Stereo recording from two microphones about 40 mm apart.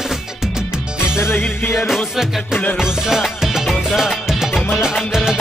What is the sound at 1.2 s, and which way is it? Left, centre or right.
Music, left.